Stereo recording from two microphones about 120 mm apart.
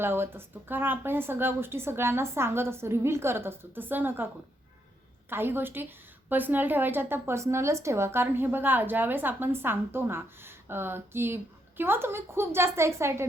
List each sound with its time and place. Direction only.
0.0 s a woman's voice: 20° right (ahead or behind)
5.3 s a woman's voice: 20° right (ahead or behind)